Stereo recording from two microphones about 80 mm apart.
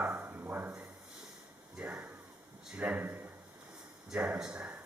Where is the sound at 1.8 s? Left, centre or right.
Centre.